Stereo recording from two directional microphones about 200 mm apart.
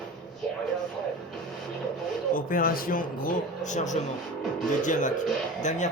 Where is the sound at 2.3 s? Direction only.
45° left (ahead or behind).